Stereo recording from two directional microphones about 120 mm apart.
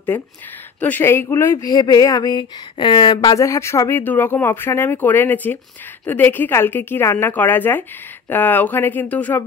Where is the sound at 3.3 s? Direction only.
25° left (ahead or behind).